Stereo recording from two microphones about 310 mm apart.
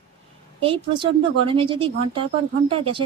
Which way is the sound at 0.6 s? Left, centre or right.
Centre.